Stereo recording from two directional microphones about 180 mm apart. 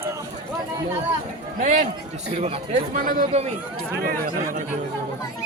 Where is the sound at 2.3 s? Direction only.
35° right (ahead or behind).